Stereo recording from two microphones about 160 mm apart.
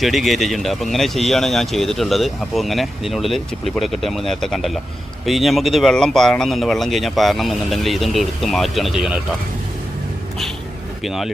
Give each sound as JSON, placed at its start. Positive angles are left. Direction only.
{"t": 0.0, "sound": "speech", "side_deg": 0}
{"t": 11.0, "sound": "speech", "side_deg": 0}